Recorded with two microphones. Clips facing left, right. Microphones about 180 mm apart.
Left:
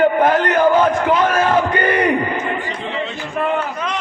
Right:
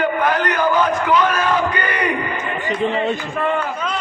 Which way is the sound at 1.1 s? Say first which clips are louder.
Left 1 dB; 50° left (ahead or behind).